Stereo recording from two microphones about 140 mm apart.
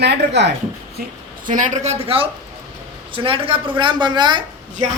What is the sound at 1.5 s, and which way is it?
A woman's voice, 65° right (ahead or behind).